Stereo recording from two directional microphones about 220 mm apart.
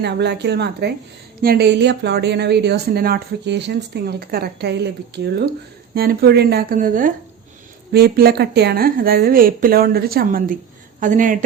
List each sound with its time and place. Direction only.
0.0 s speech: 50° right (ahead or behind)